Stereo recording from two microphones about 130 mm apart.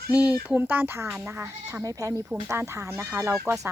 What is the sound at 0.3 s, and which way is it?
A woman's voice, 15° right (ahead or behind).